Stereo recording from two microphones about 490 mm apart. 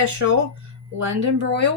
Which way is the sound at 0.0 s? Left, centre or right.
Right.